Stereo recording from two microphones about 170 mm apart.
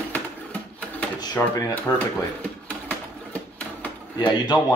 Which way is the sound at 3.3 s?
10° left (ahead or behind).